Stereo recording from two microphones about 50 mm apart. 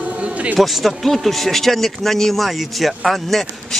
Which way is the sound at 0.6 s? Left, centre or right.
Centre.